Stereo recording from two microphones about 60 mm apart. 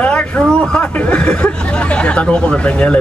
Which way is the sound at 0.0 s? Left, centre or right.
Left.